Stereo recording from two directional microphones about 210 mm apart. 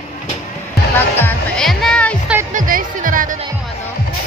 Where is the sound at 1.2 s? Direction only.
5° left (ahead or behind).